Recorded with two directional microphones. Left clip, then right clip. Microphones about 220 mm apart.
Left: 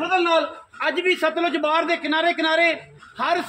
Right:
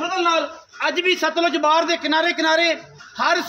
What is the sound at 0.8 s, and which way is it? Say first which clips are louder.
A man's voice: right 1 dB; 30° right (ahead or behind).